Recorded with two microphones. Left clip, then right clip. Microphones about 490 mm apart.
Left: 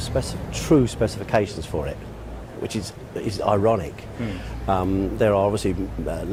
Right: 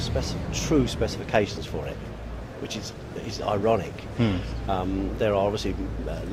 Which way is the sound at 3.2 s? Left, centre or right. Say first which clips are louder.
Left 5 dB; left.